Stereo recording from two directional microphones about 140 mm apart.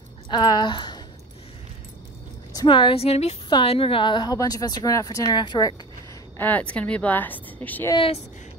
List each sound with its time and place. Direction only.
0.3 s a woman's voice: 30° left (ahead or behind)
2.5 s a woman's voice: 35° left (ahead or behind)
6.3 s a woman's voice: 10° left (ahead or behind)